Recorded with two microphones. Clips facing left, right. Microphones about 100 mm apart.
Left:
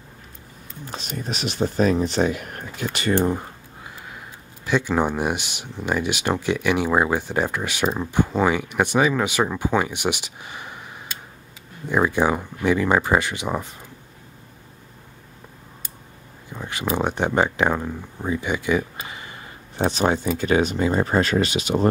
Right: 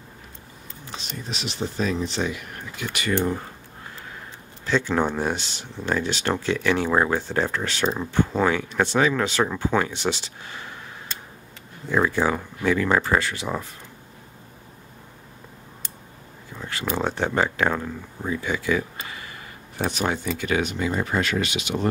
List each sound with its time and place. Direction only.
0.8 s speech: 50° left (ahead or behind)
2.9 s speech: 35° left (ahead or behind)
4.6 s speech: 15° left (ahead or behind)
16.5 s a sound: 15° left (ahead or behind)
16.8 s speech: 15° left (ahead or behind)
19.0 s a sound: 20° left (ahead or behind)
19.8 s speech: 30° left (ahead or behind)